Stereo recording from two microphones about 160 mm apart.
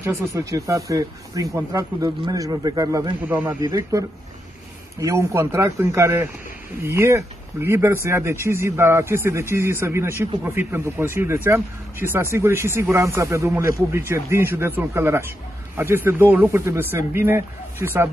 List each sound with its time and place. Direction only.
0.0 s speech: 20° right (ahead or behind)
3.2 s speech: 10° right (ahead or behind)
5.0 s speech: 15° right (ahead or behind)